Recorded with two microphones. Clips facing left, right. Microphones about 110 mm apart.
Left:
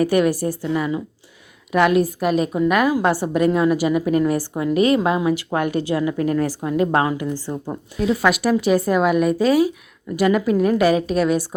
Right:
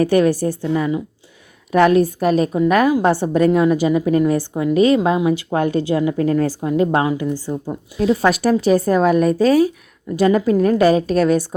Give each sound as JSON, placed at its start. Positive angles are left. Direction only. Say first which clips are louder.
{"t": 0.0, "sound": "a woman's voice", "louder": "right 3 dB", "side_deg": -30}